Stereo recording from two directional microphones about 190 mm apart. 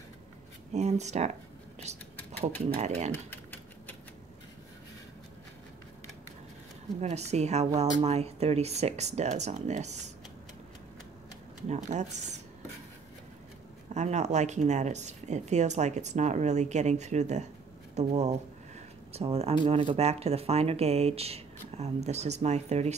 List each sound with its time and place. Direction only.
0.7 s speech: 35° right (ahead or behind)
7.0 s speech: 35° right (ahead or behind)
11.7 s speech: 40° right (ahead or behind)
13.9 s speech: 35° right (ahead or behind)